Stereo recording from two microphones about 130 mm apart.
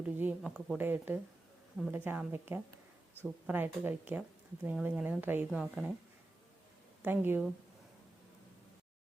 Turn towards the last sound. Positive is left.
turn(degrees=-15)  # may be behind; listen again after turning